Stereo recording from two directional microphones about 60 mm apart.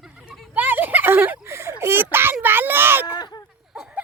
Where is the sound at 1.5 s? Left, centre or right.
Right.